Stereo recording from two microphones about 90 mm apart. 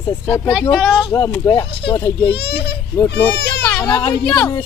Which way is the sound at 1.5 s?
70° left (ahead or behind).